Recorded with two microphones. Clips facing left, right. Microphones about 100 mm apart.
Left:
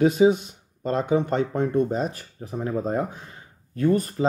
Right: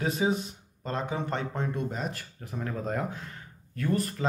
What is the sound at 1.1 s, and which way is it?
Speech, 25° left (ahead or behind).